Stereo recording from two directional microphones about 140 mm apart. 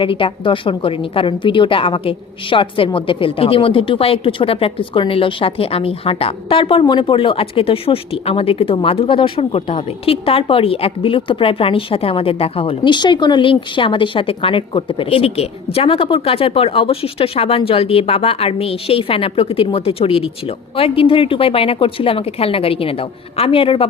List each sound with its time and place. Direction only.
0.0 s a woman's voice: 40° left (ahead or behind)